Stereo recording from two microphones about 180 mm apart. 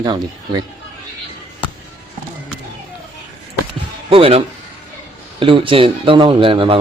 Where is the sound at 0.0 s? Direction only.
25° right (ahead or behind).